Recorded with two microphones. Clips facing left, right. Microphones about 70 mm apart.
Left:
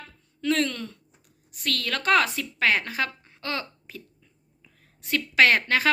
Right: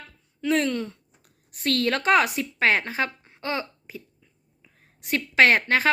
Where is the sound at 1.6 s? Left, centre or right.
Right.